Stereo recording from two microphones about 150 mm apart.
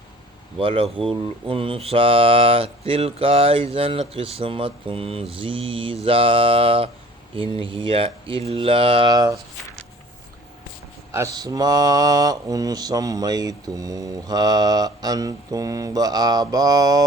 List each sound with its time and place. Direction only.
0.6 s speech: 35° right (ahead or behind)
11.3 s mantra: 25° right (ahead or behind)